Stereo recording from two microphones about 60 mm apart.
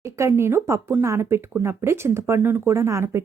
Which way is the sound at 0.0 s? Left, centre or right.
Right.